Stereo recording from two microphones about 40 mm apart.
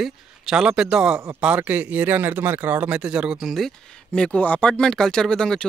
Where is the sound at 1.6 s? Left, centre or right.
Right.